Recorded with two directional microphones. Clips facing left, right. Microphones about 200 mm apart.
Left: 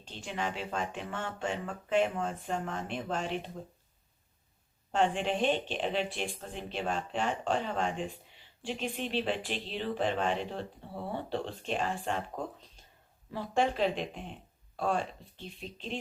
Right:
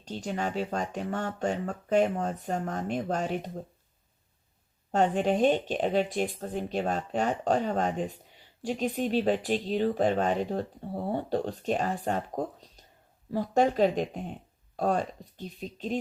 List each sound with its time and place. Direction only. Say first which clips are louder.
0.0 s speech: right 5 dB; 40° right (ahead or behind)
4.9 s speech: right 4 dB; 40° right (ahead or behind)